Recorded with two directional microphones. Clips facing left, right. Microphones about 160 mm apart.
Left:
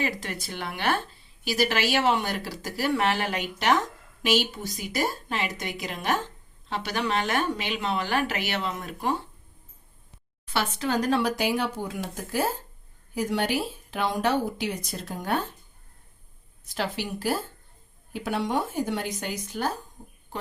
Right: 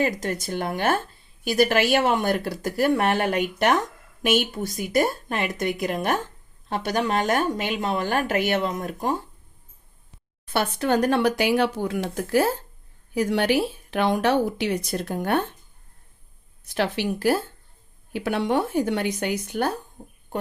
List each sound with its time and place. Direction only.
0.0 s speech: 45° right (ahead or behind)
10.5 s speech: 55° right (ahead or behind)
16.6 s speech: 65° right (ahead or behind)